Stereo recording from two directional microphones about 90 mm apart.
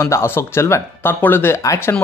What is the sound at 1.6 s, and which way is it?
Speech, 35° left (ahead or behind).